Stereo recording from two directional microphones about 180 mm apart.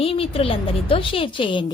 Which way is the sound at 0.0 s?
30° left (ahead or behind).